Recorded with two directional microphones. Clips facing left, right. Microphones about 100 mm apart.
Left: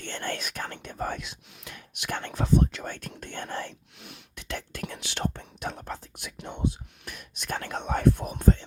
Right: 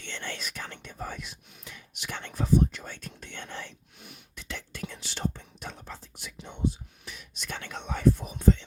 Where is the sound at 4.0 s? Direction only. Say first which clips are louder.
Left 1 dB; 70° left (ahead or behind); by 8.6 s 50° left (ahead or behind).